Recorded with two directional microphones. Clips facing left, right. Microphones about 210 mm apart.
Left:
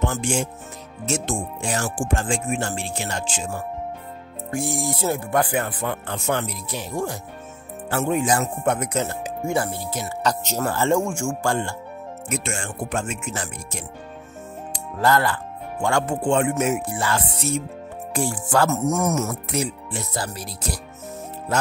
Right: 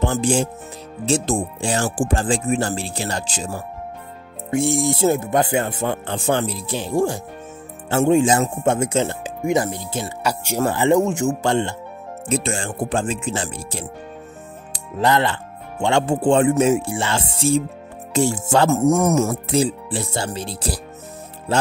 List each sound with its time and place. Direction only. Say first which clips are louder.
0.0 s speech: right 5 dB; 35° right (ahead or behind)
4.5 s speech: right 6 dB; 25° right (ahead or behind)
15.0 s speech: right 2 dB; 20° right (ahead or behind)